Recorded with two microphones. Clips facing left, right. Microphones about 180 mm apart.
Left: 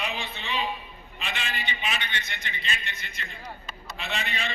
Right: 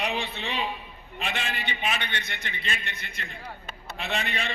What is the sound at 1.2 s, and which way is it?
A man's voice, 55° right (ahead or behind).